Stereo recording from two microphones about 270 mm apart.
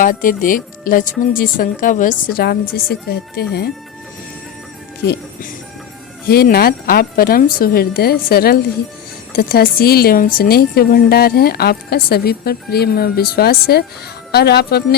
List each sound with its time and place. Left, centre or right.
0.0 s a woman's voice: left
6.2 s a woman's voice: left